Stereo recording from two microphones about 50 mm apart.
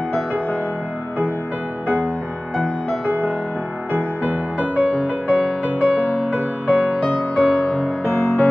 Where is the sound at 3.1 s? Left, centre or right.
Right.